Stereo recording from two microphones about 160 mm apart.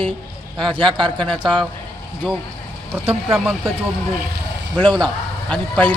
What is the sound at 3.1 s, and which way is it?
Speech, 40° right (ahead or behind).